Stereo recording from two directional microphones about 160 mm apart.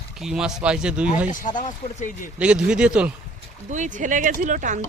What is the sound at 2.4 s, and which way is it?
Speech, 5° right (ahead or behind).